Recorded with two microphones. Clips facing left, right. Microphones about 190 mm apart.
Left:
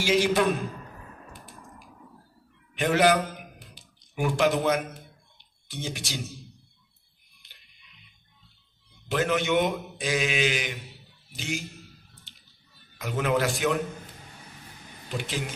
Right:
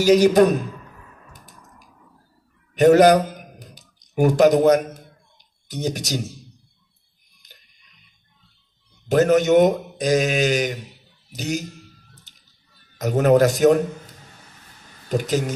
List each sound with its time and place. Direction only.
0.0 s a man's voice: 40° right (ahead or behind)
1.3 s a sound: 40° right (ahead or behind)
5.7 s a man's voice: 40° right (ahead or behind)
7.4 s music: 40° right (ahead or behind)
9.1 s a man's voice: 40° right (ahead or behind)
12.3 s a sound: 40° right (ahead or behind)
12.9 s a man's voice: 40° right (ahead or behind)
15.0 s speech: 40° right (ahead or behind)